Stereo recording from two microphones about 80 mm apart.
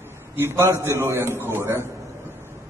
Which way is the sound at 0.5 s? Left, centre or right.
Right.